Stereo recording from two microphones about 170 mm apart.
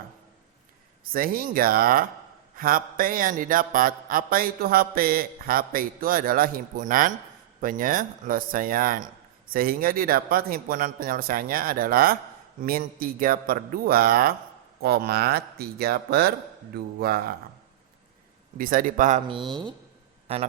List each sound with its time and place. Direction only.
1.0 s speech: 60° right (ahead or behind)
18.5 s speech: 55° right (ahead or behind)